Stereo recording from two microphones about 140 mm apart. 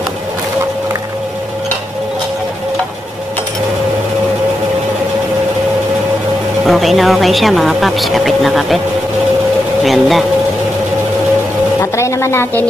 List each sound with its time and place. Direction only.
6.6 s a woman's voice: centre (ahead or behind)
9.8 s a woman's voice: centre (ahead or behind)
11.8 s a sound: 20° left (ahead or behind)